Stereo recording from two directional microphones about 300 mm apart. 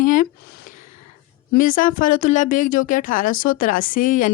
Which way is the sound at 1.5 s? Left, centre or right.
Left.